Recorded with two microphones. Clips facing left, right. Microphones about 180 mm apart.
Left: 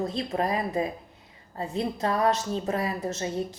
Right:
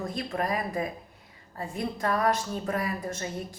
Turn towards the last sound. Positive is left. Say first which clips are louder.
# left 5 dB
turn(degrees=25)  # may be behind; listen again after turning